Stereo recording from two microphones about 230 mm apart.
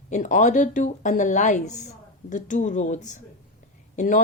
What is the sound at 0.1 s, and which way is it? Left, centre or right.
Speech, left.